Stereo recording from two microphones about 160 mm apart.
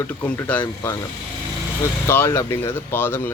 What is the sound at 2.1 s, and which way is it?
A man's voice, 15° left (ahead or behind).